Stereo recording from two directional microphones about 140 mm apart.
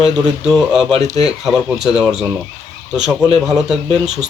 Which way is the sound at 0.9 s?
50° right (ahead or behind).